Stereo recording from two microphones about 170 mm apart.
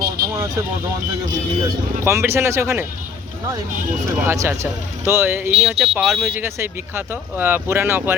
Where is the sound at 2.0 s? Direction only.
15° right (ahead or behind).